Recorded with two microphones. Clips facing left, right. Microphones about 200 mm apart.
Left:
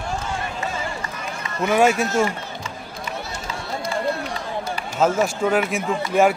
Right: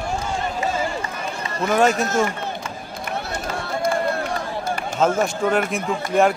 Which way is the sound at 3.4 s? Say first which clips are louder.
Right 6 dB; 50° right (ahead or behind).